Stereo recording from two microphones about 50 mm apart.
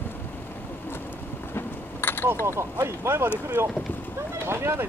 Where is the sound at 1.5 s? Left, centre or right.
Left.